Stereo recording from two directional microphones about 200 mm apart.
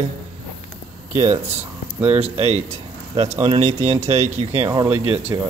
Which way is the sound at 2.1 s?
30° right (ahead or behind).